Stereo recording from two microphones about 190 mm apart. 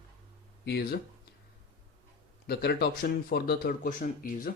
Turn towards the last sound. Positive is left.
turn(degrees=45)  # may be behind; listen again after turning